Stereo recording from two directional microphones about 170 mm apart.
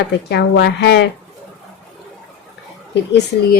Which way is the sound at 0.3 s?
85° left.